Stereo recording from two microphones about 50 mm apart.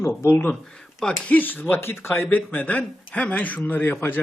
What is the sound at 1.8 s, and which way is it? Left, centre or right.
Speech, left.